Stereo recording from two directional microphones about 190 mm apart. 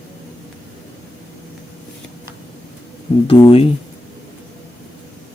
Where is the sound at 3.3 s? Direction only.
30° left (ahead or behind).